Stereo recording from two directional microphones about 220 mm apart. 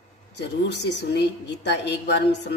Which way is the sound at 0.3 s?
50° left (ahead or behind).